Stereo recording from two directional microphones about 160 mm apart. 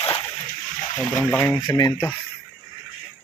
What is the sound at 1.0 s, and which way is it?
Speech, 15° left (ahead or behind).